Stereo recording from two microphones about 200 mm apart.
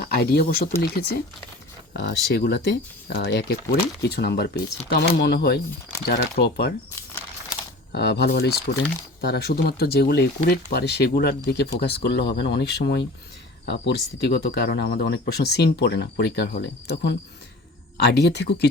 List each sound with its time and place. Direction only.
0.0 s speech: 50° left (ahead or behind)
7.9 s speech: 55° left (ahead or behind)